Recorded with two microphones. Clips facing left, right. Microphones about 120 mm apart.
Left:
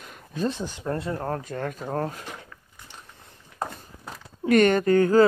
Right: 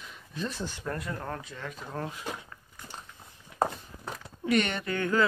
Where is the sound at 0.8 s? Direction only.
30° left (ahead or behind); by 2.2 s 45° left (ahead or behind).